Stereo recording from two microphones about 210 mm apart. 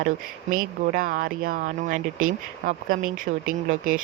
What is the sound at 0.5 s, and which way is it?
Speech, 40° right (ahead or behind).